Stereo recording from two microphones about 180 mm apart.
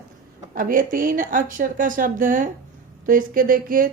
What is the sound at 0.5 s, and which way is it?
Speech, 50° right (ahead or behind).